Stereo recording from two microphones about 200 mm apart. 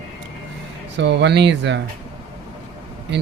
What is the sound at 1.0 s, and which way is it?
Speech, 60° right (ahead or behind).